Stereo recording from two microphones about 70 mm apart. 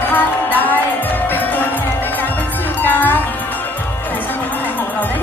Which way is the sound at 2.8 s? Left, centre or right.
Left.